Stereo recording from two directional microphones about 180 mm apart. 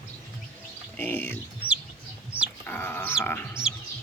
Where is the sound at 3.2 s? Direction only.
10° left (ahead or behind).